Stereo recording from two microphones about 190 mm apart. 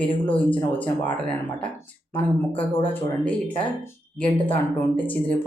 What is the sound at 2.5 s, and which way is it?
Speech, 30° left (ahead or behind).